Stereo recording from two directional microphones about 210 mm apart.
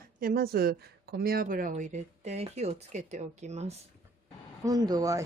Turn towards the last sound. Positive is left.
turn(degrees=-15)  # may be behind; listen again after turning